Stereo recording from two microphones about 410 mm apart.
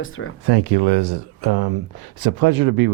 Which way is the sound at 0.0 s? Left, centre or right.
Left.